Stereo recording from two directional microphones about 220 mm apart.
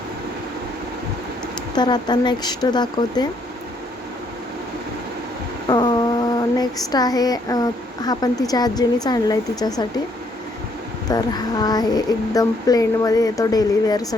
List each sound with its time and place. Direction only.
1.7 s speech: 20° left (ahead or behind)
5.6 s speech: 20° left (ahead or behind)
11.1 s speech: 15° left (ahead or behind)